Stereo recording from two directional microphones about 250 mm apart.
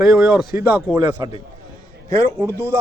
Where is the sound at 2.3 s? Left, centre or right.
Centre.